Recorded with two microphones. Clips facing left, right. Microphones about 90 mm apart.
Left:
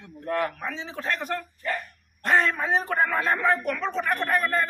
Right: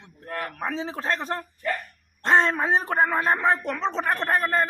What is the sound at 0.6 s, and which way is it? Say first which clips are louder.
A man's voice: right 4 dB; 40° right (ahead or behind).